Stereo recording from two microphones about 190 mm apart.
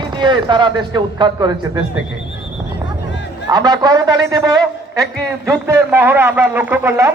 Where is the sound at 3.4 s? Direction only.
20° right (ahead or behind).